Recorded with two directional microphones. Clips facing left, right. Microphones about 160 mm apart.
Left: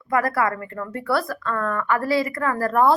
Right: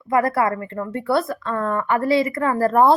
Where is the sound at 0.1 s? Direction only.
25° right (ahead or behind).